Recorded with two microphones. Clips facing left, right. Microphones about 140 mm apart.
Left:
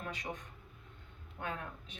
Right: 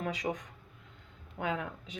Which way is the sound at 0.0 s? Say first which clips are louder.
Right 8 dB; 85° right.